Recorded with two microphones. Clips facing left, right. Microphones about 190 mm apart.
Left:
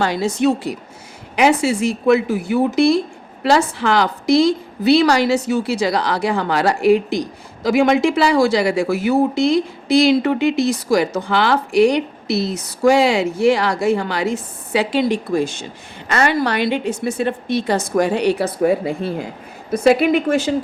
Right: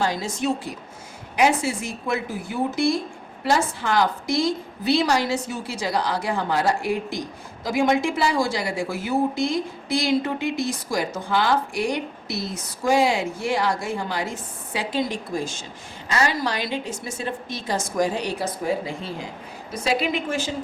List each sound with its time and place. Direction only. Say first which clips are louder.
0.0 s a woman's voice: left 7 dB; 70° left (ahead or behind)